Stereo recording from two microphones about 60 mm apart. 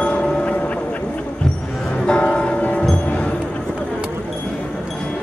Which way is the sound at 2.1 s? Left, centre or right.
Centre.